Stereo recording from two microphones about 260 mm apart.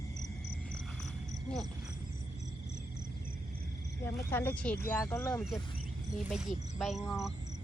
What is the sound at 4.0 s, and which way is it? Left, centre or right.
Speech, centre.